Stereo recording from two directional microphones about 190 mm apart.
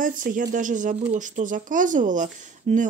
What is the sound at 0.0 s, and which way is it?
Speech, 45° right (ahead or behind).